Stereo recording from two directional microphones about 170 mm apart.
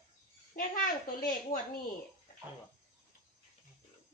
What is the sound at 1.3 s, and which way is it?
Speech, 55° left (ahead or behind).